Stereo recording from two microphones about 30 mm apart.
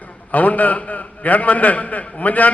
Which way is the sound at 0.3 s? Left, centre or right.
Left.